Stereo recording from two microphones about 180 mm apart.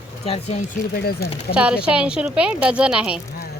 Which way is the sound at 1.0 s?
60° left (ahead or behind).